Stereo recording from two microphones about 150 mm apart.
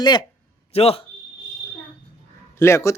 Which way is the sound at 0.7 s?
40° left (ahead or behind).